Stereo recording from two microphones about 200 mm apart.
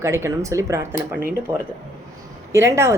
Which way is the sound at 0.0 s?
15° right (ahead or behind).